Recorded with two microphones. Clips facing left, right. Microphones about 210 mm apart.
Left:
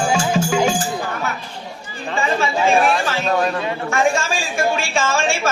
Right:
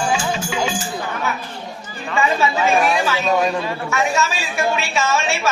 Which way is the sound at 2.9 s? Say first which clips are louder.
Right 1 dB; 15° right (ahead or behind).